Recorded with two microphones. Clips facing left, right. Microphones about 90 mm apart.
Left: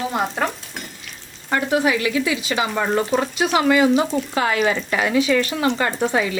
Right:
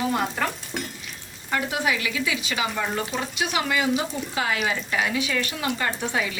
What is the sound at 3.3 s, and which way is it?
Speech, 35° left (ahead or behind).